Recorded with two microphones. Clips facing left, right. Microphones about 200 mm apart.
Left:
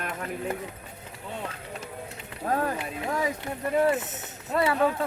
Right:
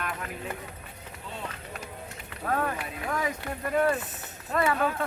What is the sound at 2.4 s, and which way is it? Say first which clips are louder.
Speech: left 2 dB; 30° left (ahead or behind).